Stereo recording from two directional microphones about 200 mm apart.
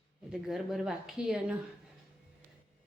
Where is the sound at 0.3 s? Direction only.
Centre (ahead or behind).